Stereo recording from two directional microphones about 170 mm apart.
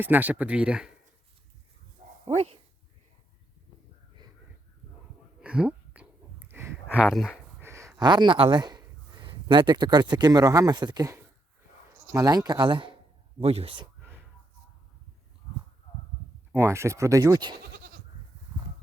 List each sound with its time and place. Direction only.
0.0 s speech: 10° right (ahead or behind)
2.2 s speech: 40° right (ahead or behind)
5.4 s a sound: 5° right (ahead or behind)
6.9 s speech: 5° right (ahead or behind)
7.6 s speech: 15° right (ahead or behind); by 13.8 s 35° right (ahead or behind)
16.5 s speech: 15° right (ahead or behind)
17.7 s goat: 60° right (ahead or behind)